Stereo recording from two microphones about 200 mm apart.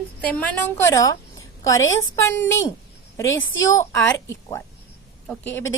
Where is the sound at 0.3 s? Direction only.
5° left (ahead or behind).